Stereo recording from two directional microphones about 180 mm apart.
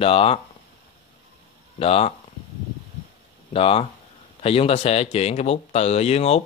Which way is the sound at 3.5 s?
30° left (ahead or behind).